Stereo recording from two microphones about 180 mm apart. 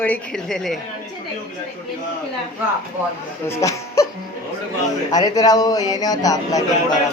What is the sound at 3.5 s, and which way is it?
Speech, 15° left (ahead or behind).